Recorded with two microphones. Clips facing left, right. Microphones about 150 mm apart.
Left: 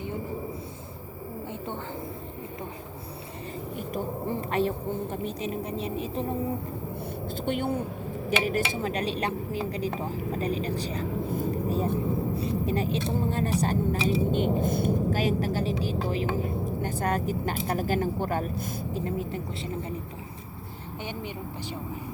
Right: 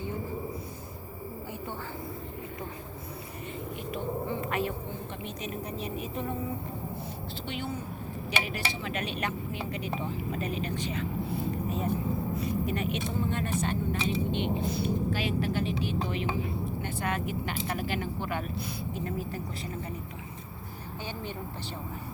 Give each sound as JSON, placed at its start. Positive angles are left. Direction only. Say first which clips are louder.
{"t": 3.8, "sound": "a sound", "louder": "left 1 dB", "side_deg": 40}
{"t": 5.1, "sound": "speech", "louder": "left 6 dB", "side_deg": 35}
{"t": 7.4, "sound": "a woman's voice", "louder": "left 8 dB", "side_deg": 50}
{"t": 18.9, "sound": "speech", "louder": "left 4 dB", "side_deg": 25}